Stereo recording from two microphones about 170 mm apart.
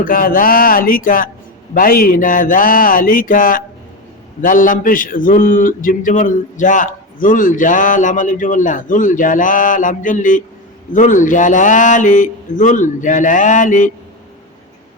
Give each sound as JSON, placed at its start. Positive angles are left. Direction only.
{"t": 0.0, "sound": "a man's voice", "side_deg": 55}